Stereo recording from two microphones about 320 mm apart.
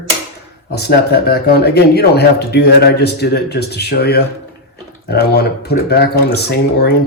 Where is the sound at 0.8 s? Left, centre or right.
Left.